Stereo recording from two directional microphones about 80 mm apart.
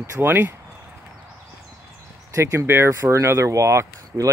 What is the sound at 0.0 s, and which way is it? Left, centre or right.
Speech, right.